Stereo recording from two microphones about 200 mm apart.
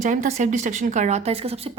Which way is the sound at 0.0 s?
40° right (ahead or behind).